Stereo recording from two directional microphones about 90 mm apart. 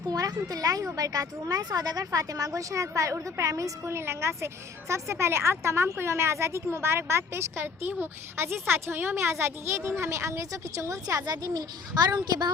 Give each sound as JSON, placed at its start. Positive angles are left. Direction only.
{"t": 0.1, "sound": "a child's voice", "side_deg": -45}